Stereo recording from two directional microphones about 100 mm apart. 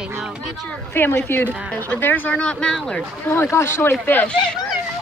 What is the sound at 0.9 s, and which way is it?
Speech, 20° left (ahead or behind).